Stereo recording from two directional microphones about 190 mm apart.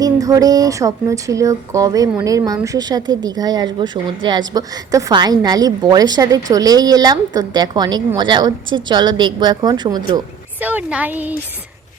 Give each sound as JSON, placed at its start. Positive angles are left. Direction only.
{"t": 0.0, "sound": "a woman's voice", "side_deg": -20}
{"t": 10.6, "sound": "speech", "side_deg": -10}